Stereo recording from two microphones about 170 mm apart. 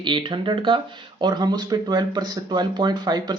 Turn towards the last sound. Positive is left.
turn(degrees=-25)  # may be behind; listen again after turning